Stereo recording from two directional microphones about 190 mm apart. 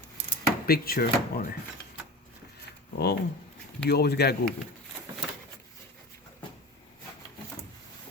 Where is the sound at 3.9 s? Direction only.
55° left (ahead or behind).